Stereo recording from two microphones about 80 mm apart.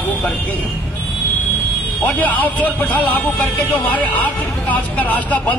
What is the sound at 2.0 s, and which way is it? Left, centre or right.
Speech, left.